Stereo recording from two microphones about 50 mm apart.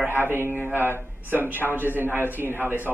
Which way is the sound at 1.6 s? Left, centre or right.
Centre.